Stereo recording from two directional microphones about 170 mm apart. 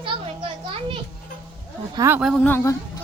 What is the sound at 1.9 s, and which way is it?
Speech, 15° right (ahead or behind).